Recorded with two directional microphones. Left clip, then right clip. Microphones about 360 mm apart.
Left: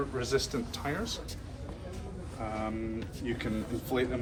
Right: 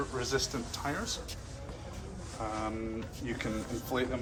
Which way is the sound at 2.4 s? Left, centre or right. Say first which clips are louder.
Even; centre.